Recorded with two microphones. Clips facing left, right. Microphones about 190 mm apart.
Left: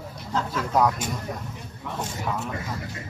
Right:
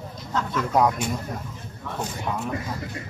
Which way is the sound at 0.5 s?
Centre (ahead or behind).